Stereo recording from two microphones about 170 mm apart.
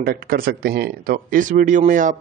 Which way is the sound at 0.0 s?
60° right (ahead or behind).